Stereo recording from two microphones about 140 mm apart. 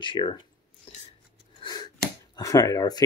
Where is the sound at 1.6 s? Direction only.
30° left (ahead or behind).